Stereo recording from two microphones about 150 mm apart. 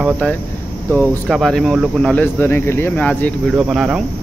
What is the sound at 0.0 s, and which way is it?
Speech, 10° left (ahead or behind).